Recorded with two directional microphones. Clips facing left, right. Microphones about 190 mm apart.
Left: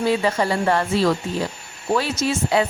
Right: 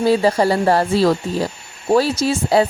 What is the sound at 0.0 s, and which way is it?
Speech, 35° right (ahead or behind).